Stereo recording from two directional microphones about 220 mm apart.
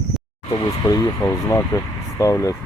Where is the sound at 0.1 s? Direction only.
Centre (ahead or behind).